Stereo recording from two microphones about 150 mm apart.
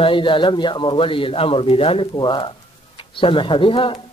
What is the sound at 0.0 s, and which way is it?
Speech, 35° left (ahead or behind).